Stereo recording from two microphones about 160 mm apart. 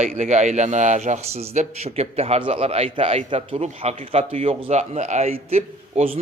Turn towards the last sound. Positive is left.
turn(degrees=-40)  # may be behind; listen again after turning